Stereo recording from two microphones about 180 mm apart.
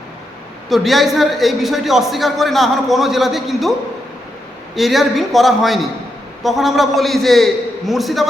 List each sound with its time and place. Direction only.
0.7 s a man's voice: centre (ahead or behind)
4.7 s a man's voice: centre (ahead or behind)